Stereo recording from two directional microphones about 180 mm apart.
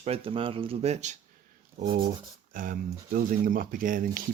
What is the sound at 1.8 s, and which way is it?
Speech, 50° right (ahead or behind).